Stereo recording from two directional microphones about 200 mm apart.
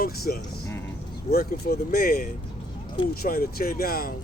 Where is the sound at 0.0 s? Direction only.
50° left (ahead or behind).